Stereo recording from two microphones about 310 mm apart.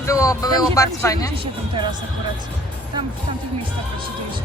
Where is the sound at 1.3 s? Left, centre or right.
Centre.